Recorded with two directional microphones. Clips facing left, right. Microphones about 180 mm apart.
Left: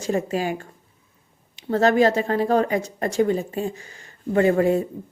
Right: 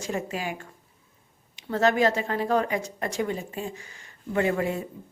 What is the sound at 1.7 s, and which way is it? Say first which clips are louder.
Speech: left 5 dB; 35° left (ahead or behind).